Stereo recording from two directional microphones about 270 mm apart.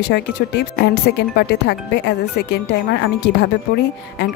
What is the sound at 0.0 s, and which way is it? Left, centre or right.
Speech, left.